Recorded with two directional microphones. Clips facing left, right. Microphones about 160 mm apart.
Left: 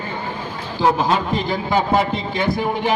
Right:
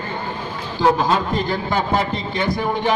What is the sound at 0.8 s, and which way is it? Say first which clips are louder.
A man's voice: even; 5° left (ahead or behind).